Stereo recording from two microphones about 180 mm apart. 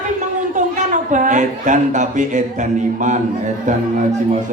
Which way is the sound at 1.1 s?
45° right (ahead or behind).